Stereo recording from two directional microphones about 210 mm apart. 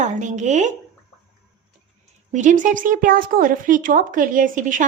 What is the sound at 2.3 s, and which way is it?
Speech, 35° right (ahead or behind).